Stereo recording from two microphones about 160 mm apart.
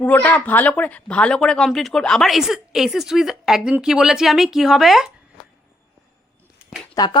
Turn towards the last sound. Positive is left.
turn(degrees=20)  # may be behind; listen again after turning